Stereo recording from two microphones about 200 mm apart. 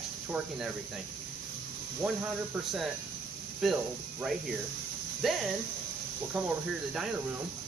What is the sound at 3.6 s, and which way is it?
Speech, centre (ahead or behind).